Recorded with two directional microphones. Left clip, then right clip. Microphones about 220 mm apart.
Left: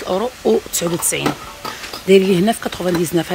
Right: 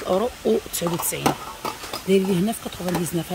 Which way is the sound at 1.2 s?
45° right (ahead or behind).